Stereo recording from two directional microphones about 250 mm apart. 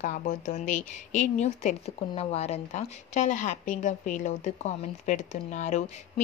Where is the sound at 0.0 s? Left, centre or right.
Left.